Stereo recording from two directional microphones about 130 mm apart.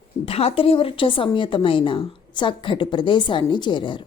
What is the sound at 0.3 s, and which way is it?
A woman's voice, 50° left (ahead or behind).